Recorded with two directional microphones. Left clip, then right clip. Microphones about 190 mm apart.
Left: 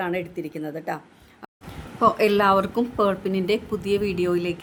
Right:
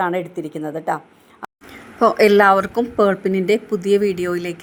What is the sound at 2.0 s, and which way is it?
A woman's voice, 25° right (ahead or behind).